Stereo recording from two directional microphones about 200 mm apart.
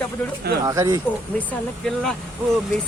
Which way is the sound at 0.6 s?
15° right (ahead or behind).